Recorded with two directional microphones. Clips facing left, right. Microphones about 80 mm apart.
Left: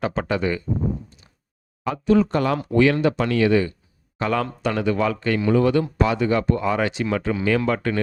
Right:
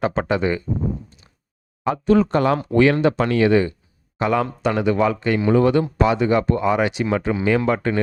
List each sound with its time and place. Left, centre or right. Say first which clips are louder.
0.0 s speech: right 3 dB; right
2.0 s speech: right 2 dB; right
4.2 s speech: right 3 dB; centre